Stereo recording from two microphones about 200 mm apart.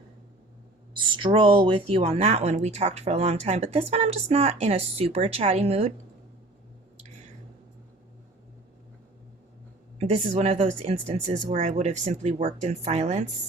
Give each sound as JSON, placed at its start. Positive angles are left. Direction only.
{"t": 0.9, "sound": "speech", "side_deg": -25}
{"t": 10.0, "sound": "speech", "side_deg": -30}